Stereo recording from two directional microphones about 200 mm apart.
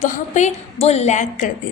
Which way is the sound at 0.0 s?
35° left (ahead or behind).